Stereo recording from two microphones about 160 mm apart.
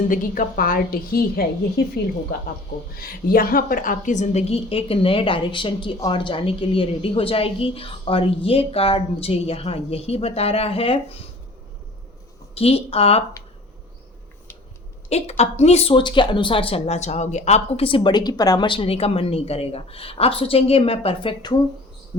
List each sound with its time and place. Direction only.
0.1 s a woman's voice: 60° left (ahead or behind); by 11.2 s 35° left (ahead or behind)
12.5 s a woman's voice: 40° left (ahead or behind)
15.1 s a woman's voice: 40° left (ahead or behind)